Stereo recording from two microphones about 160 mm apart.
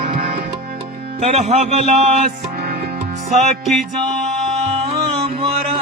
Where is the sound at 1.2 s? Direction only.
45° right (ahead or behind).